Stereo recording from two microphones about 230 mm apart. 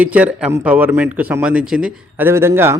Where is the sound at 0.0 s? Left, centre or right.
Centre.